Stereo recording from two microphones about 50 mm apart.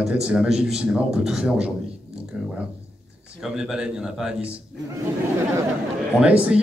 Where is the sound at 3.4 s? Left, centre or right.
Centre.